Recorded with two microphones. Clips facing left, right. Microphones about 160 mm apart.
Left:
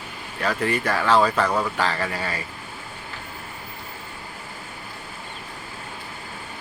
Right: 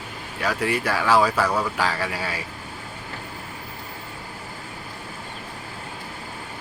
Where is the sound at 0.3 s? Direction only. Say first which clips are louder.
Even; 10° right (ahead or behind).